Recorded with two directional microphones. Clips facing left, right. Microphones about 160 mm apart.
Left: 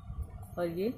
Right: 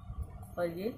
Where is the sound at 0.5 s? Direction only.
20° left (ahead or behind).